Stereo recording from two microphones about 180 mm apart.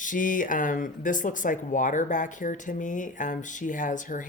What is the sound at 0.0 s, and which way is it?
Speech, 45° left (ahead or behind).